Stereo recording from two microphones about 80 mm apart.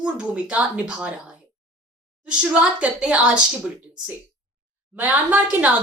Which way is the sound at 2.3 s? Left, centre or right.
Centre.